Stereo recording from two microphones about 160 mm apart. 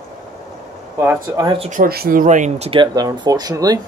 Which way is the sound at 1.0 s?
15° right (ahead or behind).